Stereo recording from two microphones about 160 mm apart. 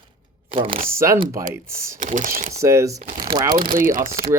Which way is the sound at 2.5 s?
20° right (ahead or behind).